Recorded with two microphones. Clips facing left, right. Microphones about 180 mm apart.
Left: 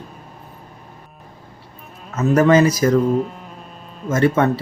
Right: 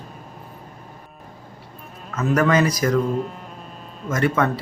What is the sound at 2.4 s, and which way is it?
Speech, 30° left (ahead or behind).